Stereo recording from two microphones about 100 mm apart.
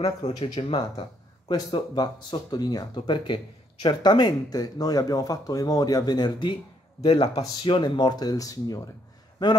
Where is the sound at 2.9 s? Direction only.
55° left (ahead or behind).